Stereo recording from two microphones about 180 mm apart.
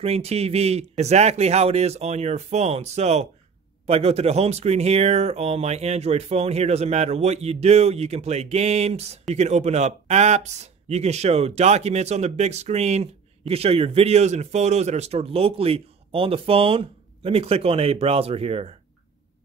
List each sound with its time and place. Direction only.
0.0 s speech: 35° right (ahead or behind)